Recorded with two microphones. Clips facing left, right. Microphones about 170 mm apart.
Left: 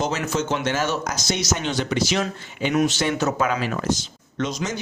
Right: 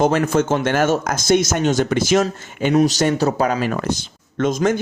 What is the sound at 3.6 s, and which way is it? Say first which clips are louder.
Speech: right 3 dB; 55° right (ahead or behind).